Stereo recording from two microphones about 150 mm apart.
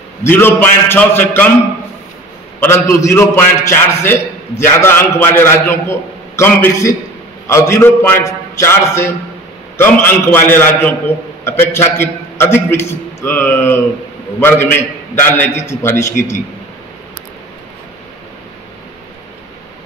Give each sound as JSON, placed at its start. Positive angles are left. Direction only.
{"t": 0.2, "sound": "a man's voice", "side_deg": 15}
{"t": 2.6, "sound": "a man's voice", "side_deg": 20}